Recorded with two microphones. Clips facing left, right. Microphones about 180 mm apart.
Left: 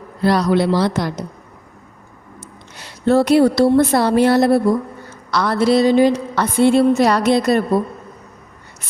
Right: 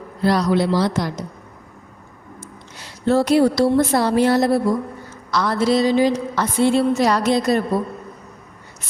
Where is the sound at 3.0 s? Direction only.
60° left (ahead or behind).